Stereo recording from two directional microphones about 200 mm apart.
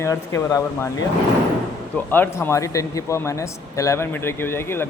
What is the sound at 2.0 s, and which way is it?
A man's voice, 10° left (ahead or behind).